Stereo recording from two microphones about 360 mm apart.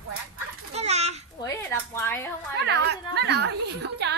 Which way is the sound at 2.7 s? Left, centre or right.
Right.